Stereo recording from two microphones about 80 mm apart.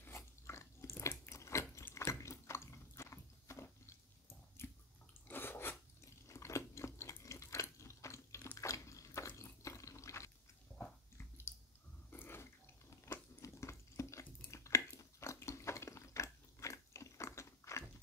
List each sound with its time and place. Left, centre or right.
0.0 s biting: left
2.0 s a sound: left
5.3 s sneeze: left
6.2 s chewing: left
8.5 s water: left
11.1 s squish: left
12.1 s water: left
13.0 s a sound: left